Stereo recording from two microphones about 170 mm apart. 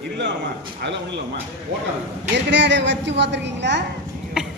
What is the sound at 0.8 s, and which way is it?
Speech, 90° right.